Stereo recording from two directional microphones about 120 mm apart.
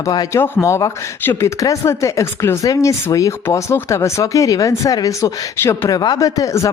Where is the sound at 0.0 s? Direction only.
35° left (ahead or behind).